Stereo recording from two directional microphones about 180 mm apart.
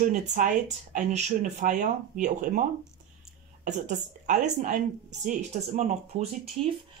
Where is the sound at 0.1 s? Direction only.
40° right (ahead or behind).